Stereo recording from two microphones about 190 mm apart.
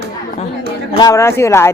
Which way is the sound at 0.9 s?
20° left (ahead or behind).